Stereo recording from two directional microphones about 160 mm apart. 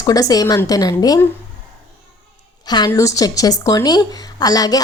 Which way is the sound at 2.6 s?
25° left (ahead or behind).